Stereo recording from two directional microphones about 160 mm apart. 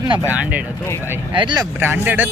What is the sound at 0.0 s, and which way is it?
Speech, 25° right (ahead or behind).